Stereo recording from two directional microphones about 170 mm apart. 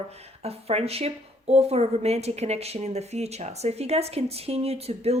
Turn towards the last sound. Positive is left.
turn(degrees=-35)  # may be behind; listen again after turning